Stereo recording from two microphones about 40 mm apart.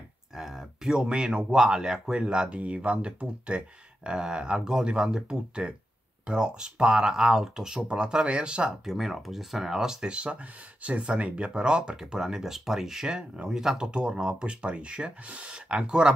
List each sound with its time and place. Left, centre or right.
0.4 s speech: centre
8.8 s speech: centre
10.0 s speech: right